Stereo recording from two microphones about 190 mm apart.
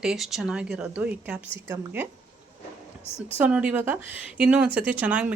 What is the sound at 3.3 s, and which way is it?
Speech, 5° right (ahead or behind).